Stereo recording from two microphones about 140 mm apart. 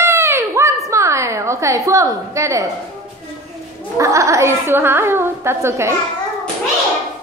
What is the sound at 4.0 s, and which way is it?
A woman's voice, 20° right (ahead or behind).